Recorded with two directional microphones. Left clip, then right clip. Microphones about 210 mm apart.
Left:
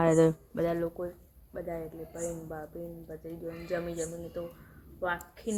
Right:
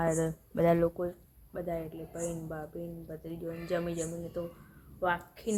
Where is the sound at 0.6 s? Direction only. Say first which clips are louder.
Right 4 dB; 30° right (ahead or behind).